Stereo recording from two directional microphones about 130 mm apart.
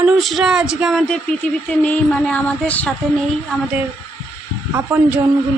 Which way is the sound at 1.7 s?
10° left (ahead or behind).